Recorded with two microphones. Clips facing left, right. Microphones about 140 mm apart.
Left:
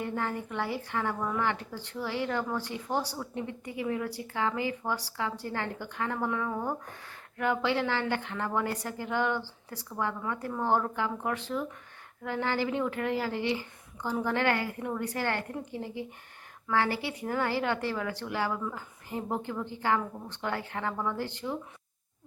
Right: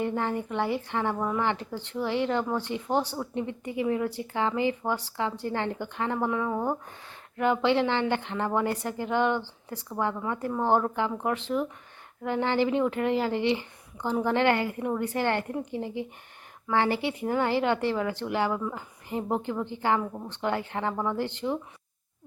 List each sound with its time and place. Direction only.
0.0 s speech: 25° right (ahead or behind)